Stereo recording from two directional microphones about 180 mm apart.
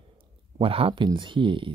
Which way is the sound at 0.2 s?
30° right (ahead or behind).